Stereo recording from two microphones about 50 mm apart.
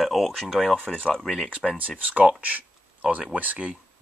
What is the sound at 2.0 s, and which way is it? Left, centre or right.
Speech, right.